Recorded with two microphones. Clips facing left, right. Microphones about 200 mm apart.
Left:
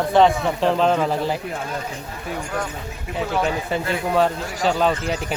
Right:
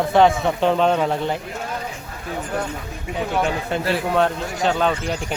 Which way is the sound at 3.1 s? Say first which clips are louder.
Even; centre (ahead or behind).